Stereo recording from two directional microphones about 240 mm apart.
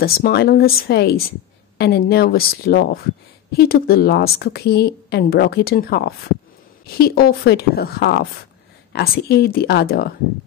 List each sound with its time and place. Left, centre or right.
0.0 s a woman's voice: left